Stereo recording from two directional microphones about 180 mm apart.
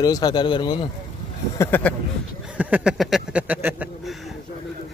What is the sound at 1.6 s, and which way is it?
Speech, 10° left (ahead or behind).